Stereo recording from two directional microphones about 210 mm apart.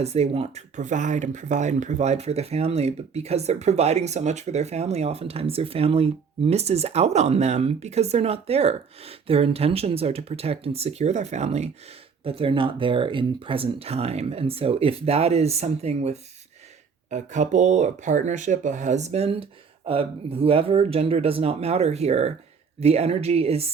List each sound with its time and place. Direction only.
0.0 s speech: 30° right (ahead or behind)